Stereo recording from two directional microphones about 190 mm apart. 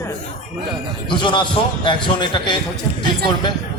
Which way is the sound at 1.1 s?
25° left (ahead or behind).